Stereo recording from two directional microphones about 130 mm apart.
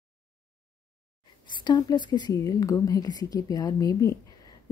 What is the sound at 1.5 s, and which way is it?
Speech, 35° left (ahead or behind).